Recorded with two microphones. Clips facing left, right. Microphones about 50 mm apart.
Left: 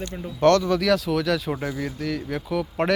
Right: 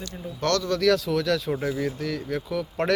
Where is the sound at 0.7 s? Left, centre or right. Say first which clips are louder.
Left 1 dB; centre.